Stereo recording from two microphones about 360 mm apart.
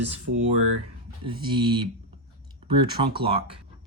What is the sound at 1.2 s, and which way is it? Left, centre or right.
Speech, centre.